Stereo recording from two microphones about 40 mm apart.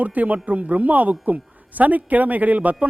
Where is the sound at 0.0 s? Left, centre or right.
Right.